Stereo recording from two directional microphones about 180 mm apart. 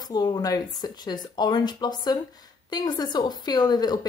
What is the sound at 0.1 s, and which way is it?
A woman's voice, 20° left (ahead or behind).